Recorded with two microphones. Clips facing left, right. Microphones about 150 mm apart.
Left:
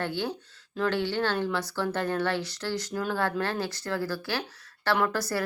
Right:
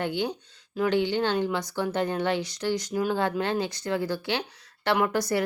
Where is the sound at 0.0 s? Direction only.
15° right (ahead or behind).